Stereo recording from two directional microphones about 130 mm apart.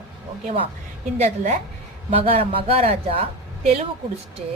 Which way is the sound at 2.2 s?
50° right (ahead or behind).